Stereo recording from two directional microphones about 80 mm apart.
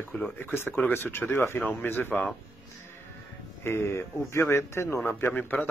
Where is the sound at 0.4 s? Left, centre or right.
Left.